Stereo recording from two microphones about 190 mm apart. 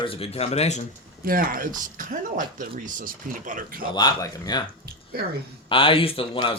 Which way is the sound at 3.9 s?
20° left (ahead or behind).